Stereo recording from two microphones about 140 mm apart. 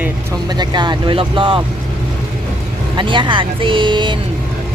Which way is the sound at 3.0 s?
35° right (ahead or behind).